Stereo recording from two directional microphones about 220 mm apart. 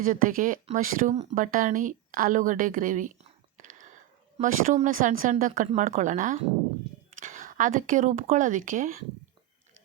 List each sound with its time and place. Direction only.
0.0 s speech: 40° right (ahead or behind)
3.6 s whispering: 35° right (ahead or behind)
4.4 s speech: 35° right (ahead or behind)